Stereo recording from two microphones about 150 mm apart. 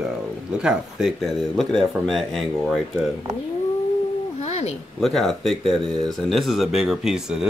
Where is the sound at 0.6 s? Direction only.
5° right (ahead or behind).